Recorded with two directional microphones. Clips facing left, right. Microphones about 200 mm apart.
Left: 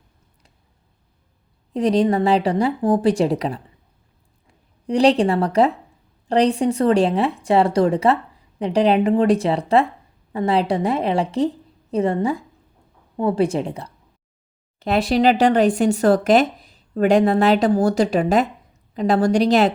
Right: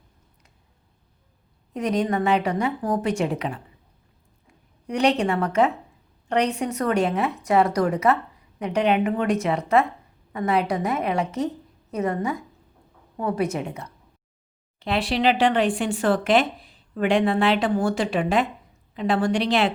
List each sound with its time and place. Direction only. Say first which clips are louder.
1.7 s speech: left 6 dB; 30° left (ahead or behind)
4.9 s a woman's voice: left 5 dB; 30° left (ahead or behind)
14.8 s speech: left 6 dB; 45° left (ahead or behind)